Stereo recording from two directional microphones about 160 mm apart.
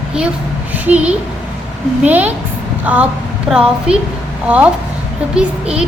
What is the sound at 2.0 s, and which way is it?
A woman's voice, 10° right (ahead or behind).